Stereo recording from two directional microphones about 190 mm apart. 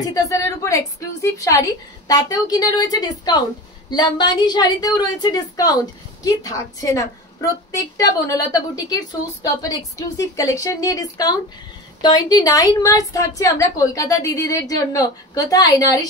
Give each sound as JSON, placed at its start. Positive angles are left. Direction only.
{"t": 0.1, "sound": "a woman's voice", "side_deg": 15}